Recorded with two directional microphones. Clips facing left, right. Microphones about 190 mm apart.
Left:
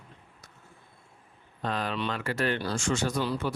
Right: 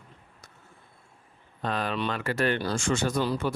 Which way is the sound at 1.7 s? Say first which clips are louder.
Right 2 dB; 60° right (ahead or behind).